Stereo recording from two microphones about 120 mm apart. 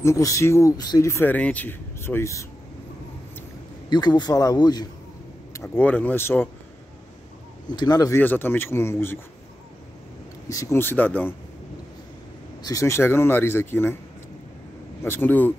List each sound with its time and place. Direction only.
0.0 s speech: 25° left (ahead or behind)
3.9 s a man's voice: 35° left (ahead or behind)
5.8 s speech: 15° left (ahead or behind)
7.7 s a man's voice: 35° left (ahead or behind)
8.1 s speech: 15° left (ahead or behind)
10.5 s speech: 25° left (ahead or behind)
12.6 s speech: 25° left (ahead or behind)
15.0 s speech: 15° left (ahead or behind)